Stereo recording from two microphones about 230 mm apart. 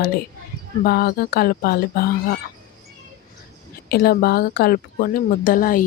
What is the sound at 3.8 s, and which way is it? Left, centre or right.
Speech, left.